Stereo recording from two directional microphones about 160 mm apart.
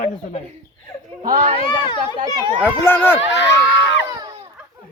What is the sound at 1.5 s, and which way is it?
Speech, 30° left (ahead or behind).